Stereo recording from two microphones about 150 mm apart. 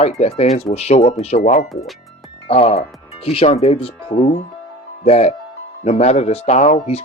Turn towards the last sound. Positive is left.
turn(degrees=50)  # may be behind; listen again after turning